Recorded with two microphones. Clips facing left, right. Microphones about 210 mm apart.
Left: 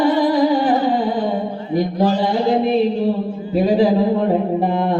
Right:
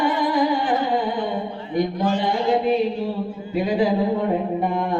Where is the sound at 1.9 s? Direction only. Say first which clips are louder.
Left 5 dB; 35° left (ahead or behind).